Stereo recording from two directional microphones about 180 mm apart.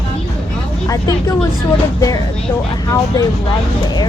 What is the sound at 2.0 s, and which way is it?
Speech, 20° left (ahead or behind).